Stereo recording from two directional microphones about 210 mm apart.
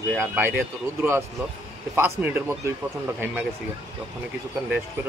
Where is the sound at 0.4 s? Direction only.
10° right (ahead or behind).